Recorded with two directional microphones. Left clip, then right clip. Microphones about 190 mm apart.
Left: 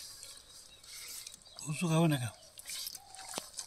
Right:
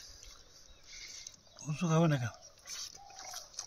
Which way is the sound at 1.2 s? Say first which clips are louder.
Left 2 dB; 60° right (ahead or behind).